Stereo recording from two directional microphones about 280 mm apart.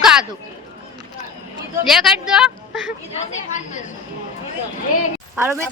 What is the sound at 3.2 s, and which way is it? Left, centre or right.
Speech, left.